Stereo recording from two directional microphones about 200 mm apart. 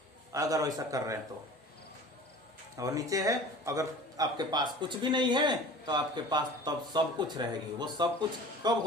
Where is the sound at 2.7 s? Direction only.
15° right (ahead or behind).